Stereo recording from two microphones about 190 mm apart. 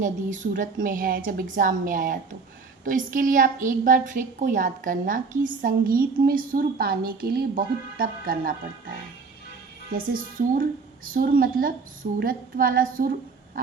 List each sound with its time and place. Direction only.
0.0 s a woman's voice: 45° right (ahead or behind)
10.1 s a woman's voice: 45° right (ahead or behind)